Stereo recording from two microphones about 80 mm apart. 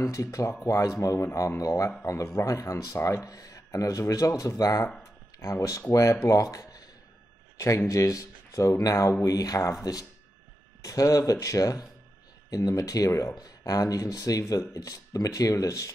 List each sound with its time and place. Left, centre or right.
0.0 s a man's voice: left
10.8 s speech: left